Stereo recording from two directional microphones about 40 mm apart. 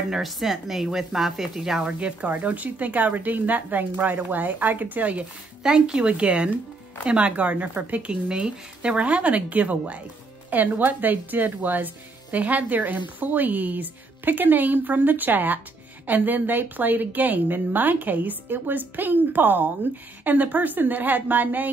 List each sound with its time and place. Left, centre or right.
0.2 s speech: centre
1.8 s a woman's voice: right
5.6 s speech: right
8.1 s a woman's voice: right